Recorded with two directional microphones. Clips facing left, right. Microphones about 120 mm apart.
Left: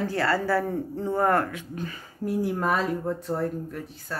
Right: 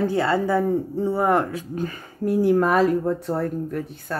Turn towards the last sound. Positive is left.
turn(degrees=-60)  # may be behind; listen again after turning